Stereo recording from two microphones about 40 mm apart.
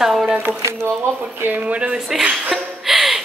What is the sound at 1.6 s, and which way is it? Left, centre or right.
Speech, right.